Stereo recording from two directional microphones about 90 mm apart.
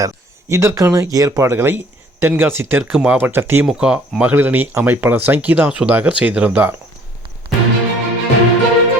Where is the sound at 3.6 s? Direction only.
10° right (ahead or behind).